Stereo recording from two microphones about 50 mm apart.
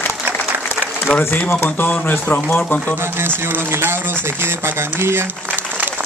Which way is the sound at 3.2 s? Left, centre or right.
Right.